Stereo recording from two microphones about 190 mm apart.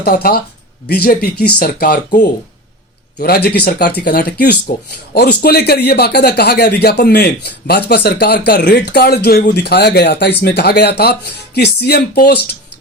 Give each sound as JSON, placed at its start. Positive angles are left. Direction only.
{"t": 0.0, "sound": "speech", "side_deg": 55}